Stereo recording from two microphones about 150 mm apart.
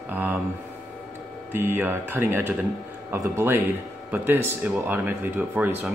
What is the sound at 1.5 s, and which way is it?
Speech, 15° right (ahead or behind).